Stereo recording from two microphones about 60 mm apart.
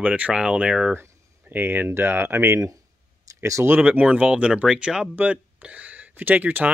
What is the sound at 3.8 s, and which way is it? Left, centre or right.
Speech, right.